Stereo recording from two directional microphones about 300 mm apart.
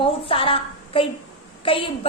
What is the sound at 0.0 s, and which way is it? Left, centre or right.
A woman's voice, centre.